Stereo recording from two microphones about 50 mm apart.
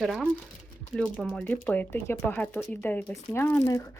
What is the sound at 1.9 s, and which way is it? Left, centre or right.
Speech, left.